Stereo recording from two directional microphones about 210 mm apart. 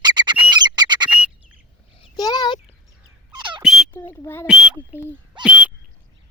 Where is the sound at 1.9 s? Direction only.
20° left (ahead or behind).